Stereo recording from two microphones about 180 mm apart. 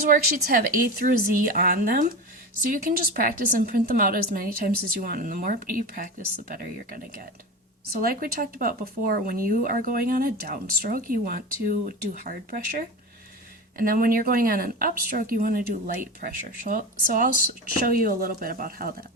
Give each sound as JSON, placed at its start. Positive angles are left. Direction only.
{"t": 0.0, "sound": "speech", "side_deg": -55}
{"t": 13.7, "sound": "speech", "side_deg": -55}